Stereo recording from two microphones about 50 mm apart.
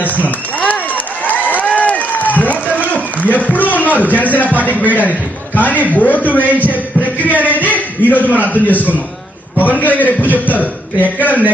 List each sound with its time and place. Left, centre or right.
0.0 s run: left
2.7 s a sound: left
4.6 s a man's voice: left